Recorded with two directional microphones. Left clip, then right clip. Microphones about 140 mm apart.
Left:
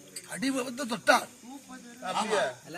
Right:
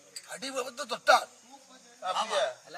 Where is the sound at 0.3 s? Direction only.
20° right (ahead or behind).